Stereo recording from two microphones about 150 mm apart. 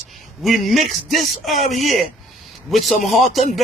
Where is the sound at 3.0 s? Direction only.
50° left (ahead or behind).